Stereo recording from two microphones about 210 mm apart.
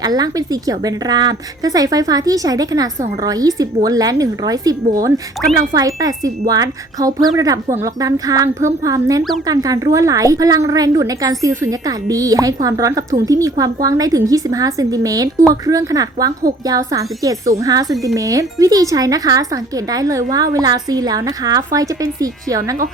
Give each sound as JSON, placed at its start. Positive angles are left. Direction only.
{"t": 0.0, "sound": "a woman's voice", "side_deg": -20}